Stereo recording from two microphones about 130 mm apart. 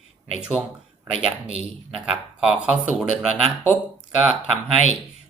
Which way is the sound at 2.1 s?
5° right (ahead or behind).